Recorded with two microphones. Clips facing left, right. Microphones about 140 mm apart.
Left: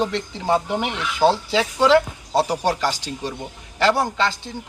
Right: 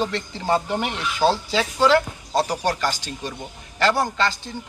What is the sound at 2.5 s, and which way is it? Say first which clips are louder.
Speech: left 2 dB; 5° left (ahead or behind).